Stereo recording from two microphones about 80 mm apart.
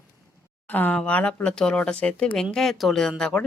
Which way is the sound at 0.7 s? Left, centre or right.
Left.